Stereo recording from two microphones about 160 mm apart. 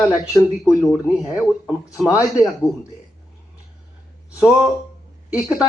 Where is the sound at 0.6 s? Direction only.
5° right (ahead or behind).